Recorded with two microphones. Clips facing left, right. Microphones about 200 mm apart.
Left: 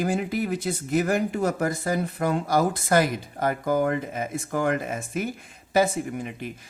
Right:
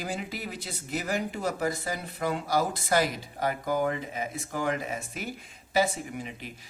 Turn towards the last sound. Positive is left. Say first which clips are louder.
# left 7 dB
turn(degrees=50)  # may be behind; listen again after turning